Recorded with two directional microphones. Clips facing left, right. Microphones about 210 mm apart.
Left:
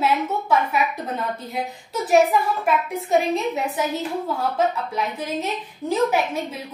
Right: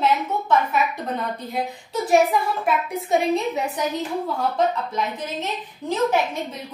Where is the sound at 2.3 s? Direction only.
Centre (ahead or behind).